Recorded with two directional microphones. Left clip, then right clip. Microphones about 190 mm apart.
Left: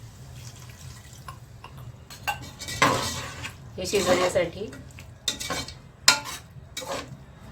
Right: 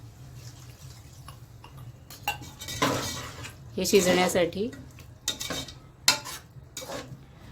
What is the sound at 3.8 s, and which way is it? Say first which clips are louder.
Speech: right 1 dB; 55° right (ahead or behind).